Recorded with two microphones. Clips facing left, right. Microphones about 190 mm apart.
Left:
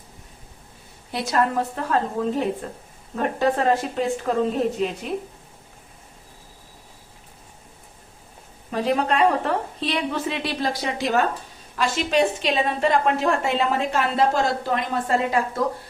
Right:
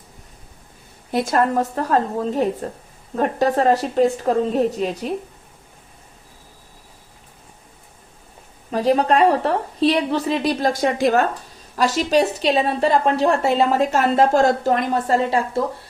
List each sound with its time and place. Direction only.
1.1 s a woman's voice: 50° right (ahead or behind)
8.7 s a woman's voice: 35° right (ahead or behind)